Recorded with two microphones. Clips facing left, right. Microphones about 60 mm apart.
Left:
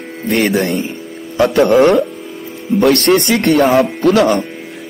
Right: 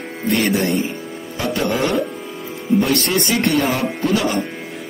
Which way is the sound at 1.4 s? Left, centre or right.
Left.